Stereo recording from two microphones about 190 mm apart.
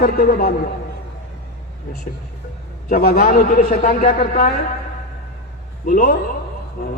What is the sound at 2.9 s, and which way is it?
A man's voice, 50° left (ahead or behind).